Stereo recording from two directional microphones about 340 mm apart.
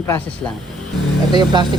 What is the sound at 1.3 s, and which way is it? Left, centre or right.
Speech, centre.